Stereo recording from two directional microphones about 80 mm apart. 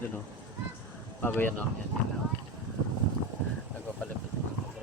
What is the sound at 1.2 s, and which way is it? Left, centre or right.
Speech, left.